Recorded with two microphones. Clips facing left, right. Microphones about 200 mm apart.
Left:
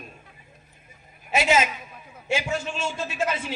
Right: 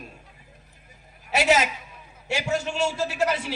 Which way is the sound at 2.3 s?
70° right (ahead or behind).